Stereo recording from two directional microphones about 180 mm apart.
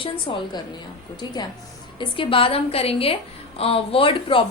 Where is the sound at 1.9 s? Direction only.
30° left (ahead or behind).